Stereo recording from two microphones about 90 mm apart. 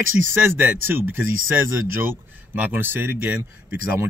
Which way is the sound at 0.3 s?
20° right (ahead or behind).